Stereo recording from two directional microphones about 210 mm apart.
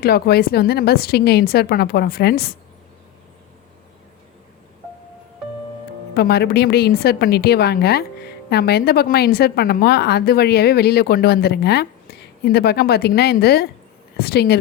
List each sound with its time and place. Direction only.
0.0 s a woman's voice: 45° left (ahead or behind)
6.1 s a woman's voice: 50° left (ahead or behind)